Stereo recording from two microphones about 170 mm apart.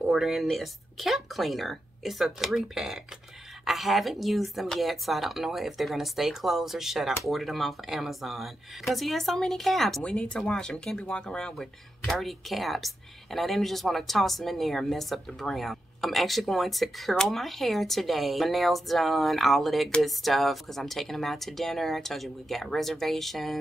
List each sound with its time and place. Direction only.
0.1 s speech: centre (ahead or behind)